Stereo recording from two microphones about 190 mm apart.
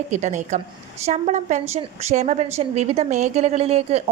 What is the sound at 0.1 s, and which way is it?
A woman's voice, 40° right (ahead or behind).